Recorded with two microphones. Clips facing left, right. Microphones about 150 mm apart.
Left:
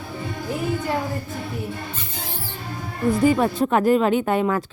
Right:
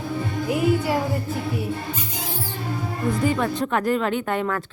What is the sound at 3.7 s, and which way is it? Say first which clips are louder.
Speech: left 6 dB; 20° left (ahead or behind).